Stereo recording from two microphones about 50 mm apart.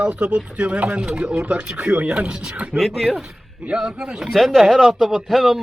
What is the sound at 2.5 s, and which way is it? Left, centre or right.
Speech, right.